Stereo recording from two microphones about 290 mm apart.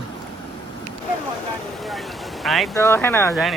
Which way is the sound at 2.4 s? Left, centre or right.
Centre.